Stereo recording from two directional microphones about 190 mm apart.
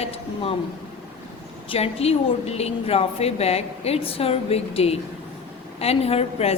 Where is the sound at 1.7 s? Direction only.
30° left (ahead or behind).